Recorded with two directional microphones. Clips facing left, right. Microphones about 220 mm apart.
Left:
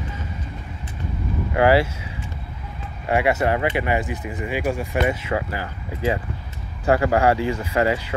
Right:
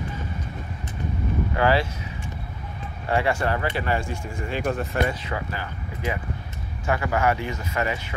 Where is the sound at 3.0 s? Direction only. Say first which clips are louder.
Left 4 dB; 20° left (ahead or behind).